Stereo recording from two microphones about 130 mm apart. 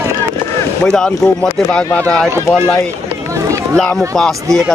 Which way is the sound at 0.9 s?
5° left (ahead or behind).